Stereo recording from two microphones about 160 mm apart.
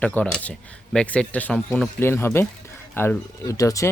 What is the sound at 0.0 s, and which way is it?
Speech, 10° left (ahead or behind).